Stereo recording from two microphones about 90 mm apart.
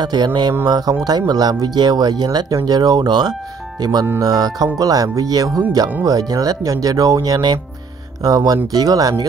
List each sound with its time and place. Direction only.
0.0 s speech: 50° right (ahead or behind)